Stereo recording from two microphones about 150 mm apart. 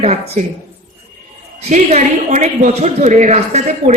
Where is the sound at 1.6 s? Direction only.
50° right (ahead or behind).